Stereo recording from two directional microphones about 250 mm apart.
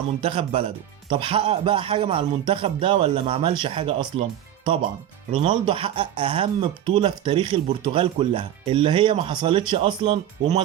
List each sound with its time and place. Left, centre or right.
0.2 s speech: right